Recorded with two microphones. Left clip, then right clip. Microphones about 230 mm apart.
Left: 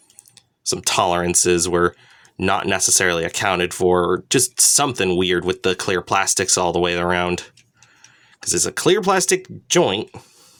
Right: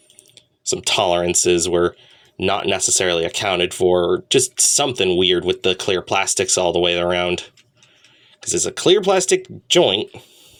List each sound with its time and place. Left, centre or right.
0.3 s speech: left
8.4 s speech: left